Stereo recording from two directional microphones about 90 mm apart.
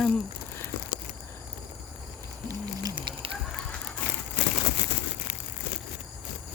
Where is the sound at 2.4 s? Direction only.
50° right (ahead or behind).